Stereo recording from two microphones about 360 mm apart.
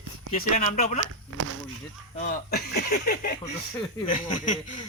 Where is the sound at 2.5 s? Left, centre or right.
Left.